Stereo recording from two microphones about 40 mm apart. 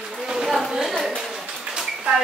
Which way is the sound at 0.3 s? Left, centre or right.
Centre.